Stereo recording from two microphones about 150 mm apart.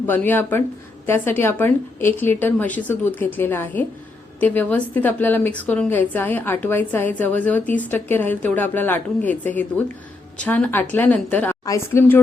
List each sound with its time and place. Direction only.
0.0 s a woman's voice: 15° left (ahead or behind)